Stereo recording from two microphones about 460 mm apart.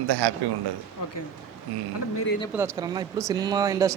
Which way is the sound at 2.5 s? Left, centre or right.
Centre.